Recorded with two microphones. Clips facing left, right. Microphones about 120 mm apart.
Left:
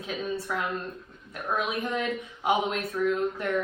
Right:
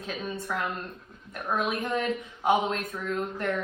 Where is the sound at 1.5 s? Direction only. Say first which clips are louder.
Right 1 dB; 10° left (ahead or behind).